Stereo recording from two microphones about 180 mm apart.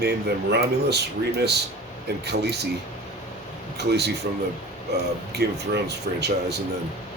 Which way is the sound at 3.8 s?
65° right (ahead or behind).